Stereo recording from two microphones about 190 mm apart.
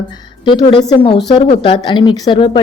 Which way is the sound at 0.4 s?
25° left (ahead or behind).